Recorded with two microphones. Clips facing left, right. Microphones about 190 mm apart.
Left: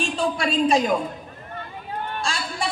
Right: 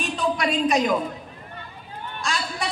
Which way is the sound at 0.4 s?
30° left (ahead or behind).